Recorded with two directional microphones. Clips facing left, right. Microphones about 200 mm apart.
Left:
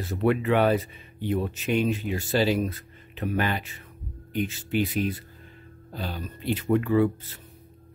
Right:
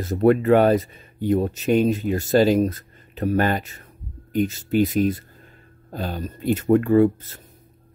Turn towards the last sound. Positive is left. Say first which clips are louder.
# right 6 dB
turn(degrees=-45)  # may be behind; listen again after turning